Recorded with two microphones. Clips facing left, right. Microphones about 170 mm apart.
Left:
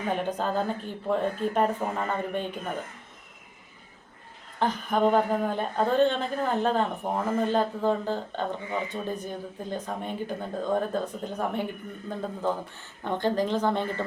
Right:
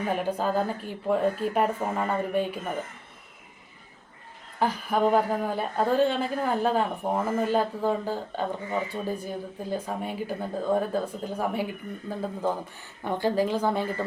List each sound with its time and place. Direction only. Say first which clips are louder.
0.1 s a woman's voice: right 1 dB; 5° right (ahead or behind)
4.6 s a woman's voice: even; 5° right (ahead or behind)